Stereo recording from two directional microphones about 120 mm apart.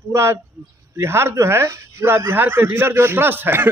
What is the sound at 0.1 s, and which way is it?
A man's voice, 20° right (ahead or behind).